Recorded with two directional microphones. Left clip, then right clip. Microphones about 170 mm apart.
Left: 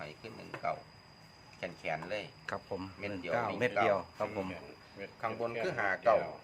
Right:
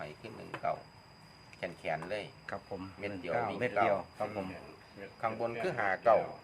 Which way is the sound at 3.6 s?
40° left (ahead or behind).